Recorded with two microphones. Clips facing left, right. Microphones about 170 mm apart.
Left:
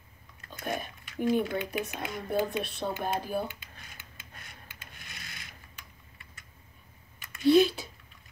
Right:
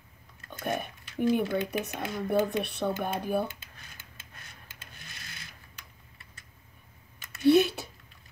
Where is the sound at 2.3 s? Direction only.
65° right (ahead or behind).